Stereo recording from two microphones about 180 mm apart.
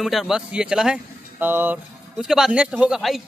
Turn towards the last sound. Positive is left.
turn(degrees=0)  # may be behind; listen again after turning